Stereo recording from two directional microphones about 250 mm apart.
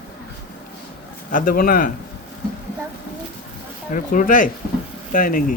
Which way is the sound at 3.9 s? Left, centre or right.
Left.